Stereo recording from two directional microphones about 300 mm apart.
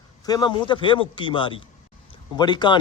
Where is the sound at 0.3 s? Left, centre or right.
Centre.